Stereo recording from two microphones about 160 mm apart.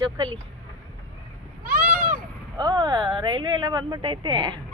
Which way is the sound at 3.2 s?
30° right (ahead or behind).